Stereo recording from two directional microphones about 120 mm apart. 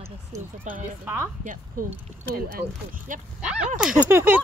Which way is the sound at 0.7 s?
90° right.